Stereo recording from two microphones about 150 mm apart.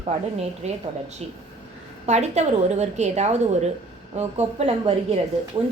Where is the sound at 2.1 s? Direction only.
50° right (ahead or behind).